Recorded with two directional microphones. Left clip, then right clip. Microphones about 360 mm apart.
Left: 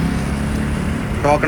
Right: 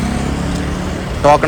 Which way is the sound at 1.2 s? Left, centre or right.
Centre.